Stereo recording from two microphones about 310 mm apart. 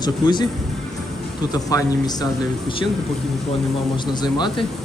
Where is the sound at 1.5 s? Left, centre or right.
Centre.